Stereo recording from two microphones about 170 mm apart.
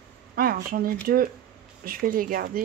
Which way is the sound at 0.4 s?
55° right (ahead or behind).